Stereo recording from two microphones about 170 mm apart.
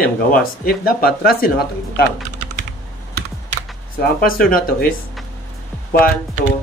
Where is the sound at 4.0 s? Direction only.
60° left (ahead or behind).